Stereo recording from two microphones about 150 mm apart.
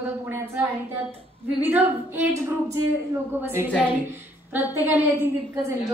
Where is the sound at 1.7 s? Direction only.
15° right (ahead or behind).